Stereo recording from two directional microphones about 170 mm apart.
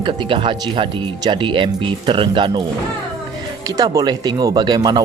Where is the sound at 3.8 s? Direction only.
25° right (ahead or behind).